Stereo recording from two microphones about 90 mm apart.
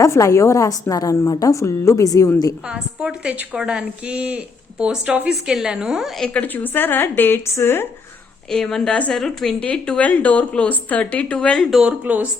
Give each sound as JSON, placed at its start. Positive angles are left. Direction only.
{"t": 0.0, "sound": "a woman's voice", "side_deg": 35}
{"t": 2.6, "sound": "a woman's voice", "side_deg": -10}
{"t": 6.2, "sound": "a woman's voice", "side_deg": 15}
{"t": 8.4, "sound": "a woman's voice", "side_deg": 5}
{"t": 12.0, "sound": "a woman's voice", "side_deg": -15}